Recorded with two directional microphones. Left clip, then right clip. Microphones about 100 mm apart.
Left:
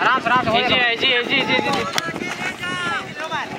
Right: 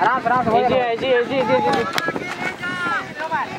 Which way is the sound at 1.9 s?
10° left (ahead or behind).